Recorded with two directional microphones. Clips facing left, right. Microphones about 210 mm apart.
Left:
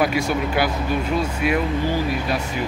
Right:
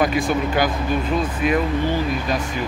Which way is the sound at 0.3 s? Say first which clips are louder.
Right 1 dB; 10° left (ahead or behind).